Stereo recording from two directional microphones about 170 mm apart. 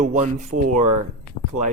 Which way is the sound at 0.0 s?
45° right (ahead or behind).